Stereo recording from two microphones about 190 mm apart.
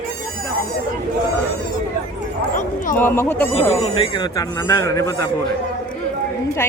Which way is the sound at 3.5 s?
30° left (ahead or behind).